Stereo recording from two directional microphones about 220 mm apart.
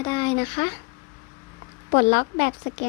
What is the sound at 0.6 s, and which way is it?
Speech, 35° left (ahead or behind).